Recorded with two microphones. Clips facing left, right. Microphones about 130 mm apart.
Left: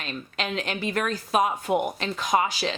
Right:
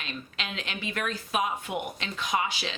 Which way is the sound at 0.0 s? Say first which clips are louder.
Left 6 dB; 45° left (ahead or behind).